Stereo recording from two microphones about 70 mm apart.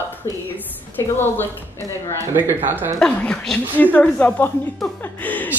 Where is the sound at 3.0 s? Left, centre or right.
Centre.